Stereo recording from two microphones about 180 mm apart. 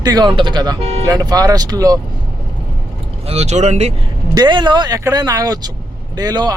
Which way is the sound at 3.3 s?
35° right (ahead or behind).